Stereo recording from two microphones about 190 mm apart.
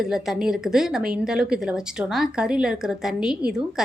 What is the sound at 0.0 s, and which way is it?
Speech, centre (ahead or behind).